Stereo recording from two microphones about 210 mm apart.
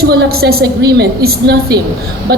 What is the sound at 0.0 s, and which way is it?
A woman's voice, 50° right (ahead or behind).